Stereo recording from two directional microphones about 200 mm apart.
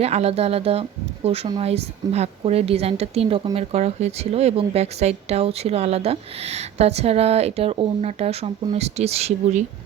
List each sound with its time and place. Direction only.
0.0 s a woman's voice: 30° right (ahead or behind)